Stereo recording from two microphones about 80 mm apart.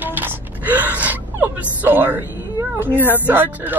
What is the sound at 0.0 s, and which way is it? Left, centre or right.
Gasp, right.